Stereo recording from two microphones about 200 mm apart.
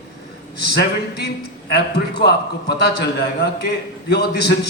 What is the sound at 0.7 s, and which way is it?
A man's voice, 55° left (ahead or behind).